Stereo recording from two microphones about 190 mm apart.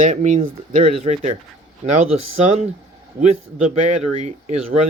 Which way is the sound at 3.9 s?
35° right (ahead or behind).